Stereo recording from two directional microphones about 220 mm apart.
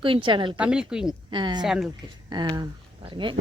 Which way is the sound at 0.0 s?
25° right (ahead or behind).